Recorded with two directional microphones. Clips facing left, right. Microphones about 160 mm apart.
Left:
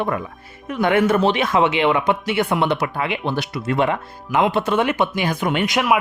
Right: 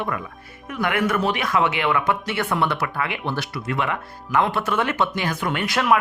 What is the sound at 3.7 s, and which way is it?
Speech, 30° left (ahead or behind).